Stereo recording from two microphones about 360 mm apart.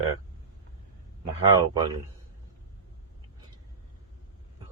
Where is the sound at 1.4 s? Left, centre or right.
Centre.